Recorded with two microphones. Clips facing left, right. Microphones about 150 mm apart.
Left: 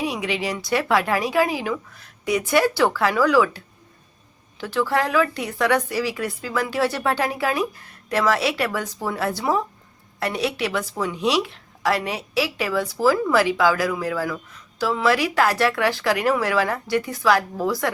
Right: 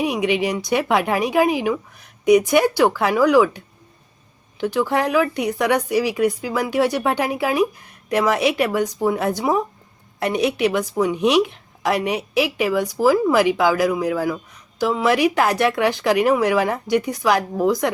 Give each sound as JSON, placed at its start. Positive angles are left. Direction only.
{"t": 0.0, "sound": "speech", "side_deg": -15}
{"t": 4.6, "sound": "speech", "side_deg": -15}